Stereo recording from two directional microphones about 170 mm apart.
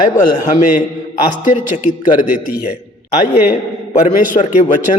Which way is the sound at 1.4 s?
50° left (ahead or behind).